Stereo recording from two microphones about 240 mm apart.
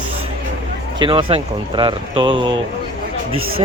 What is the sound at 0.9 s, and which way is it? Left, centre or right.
Speech, right.